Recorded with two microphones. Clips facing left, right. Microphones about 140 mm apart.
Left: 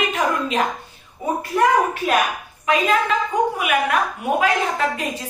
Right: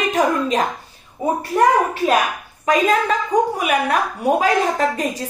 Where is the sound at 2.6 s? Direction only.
40° right (ahead or behind).